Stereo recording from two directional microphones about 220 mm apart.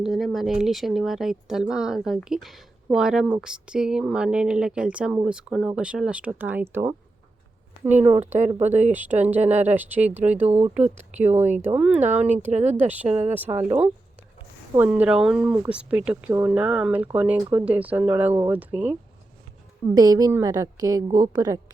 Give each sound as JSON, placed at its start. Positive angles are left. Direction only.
{"t": 0.0, "sound": "speech", "side_deg": 0}
{"t": 8.6, "sound": "speech", "side_deg": -30}
{"t": 8.9, "sound": "speech", "side_deg": -5}
{"t": 9.4, "sound": "speech", "side_deg": -30}
{"t": 9.7, "sound": "speech", "side_deg": -10}
{"t": 10.4, "sound": "speech", "side_deg": -30}
{"t": 11.7, "sound": "speech", "side_deg": -5}
{"t": 12.5, "sound": "speech", "side_deg": -30}
{"t": 13.3, "sound": "speech", "side_deg": -10}